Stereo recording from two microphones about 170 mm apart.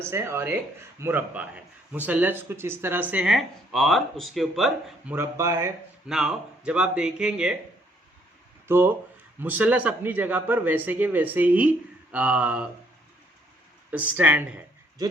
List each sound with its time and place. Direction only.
0.0 s speech: 15° right (ahead or behind)
5.1 s speech: 15° right (ahead or behind)
6.1 s speech: 5° right (ahead or behind)
8.6 s speech: 15° right (ahead or behind)
13.9 s speech: 10° right (ahead or behind)